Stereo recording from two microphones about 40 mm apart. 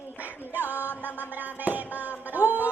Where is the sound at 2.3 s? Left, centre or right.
Right.